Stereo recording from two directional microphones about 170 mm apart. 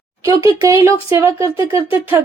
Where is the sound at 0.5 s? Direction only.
15° right (ahead or behind).